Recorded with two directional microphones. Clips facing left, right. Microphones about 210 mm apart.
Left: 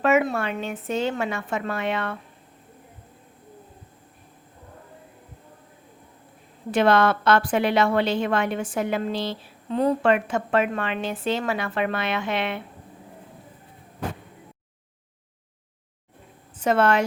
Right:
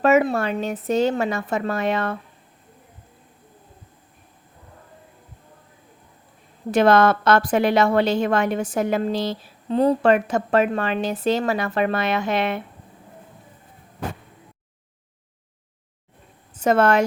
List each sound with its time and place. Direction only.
0.0 s a woman's voice: 40° right (ahead or behind)
6.7 s a woman's voice: 40° right (ahead or behind)
16.6 s a woman's voice: 45° right (ahead or behind)